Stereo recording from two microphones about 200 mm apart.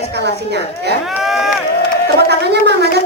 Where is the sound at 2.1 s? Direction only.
55° right (ahead or behind).